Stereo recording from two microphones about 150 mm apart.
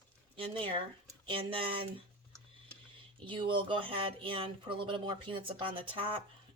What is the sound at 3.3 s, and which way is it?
Speech, 35° right (ahead or behind).